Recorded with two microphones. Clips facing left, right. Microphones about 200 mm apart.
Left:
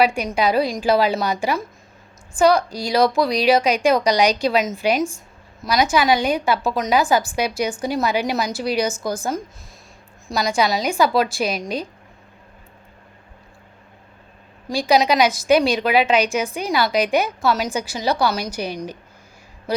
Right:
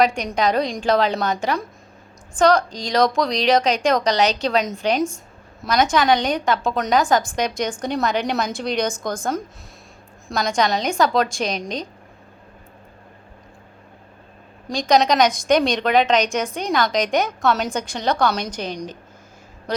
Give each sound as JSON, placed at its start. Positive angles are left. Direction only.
{"t": 0.0, "sound": "a woman's voice", "side_deg": 5}
{"t": 14.7, "sound": "a woman's voice", "side_deg": 5}